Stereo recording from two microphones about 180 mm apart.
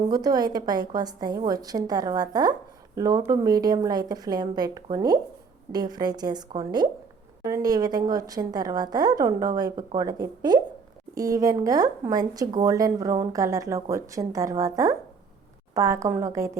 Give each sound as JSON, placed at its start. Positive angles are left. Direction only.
{"t": 0.1, "sound": "a woman's voice", "side_deg": -20}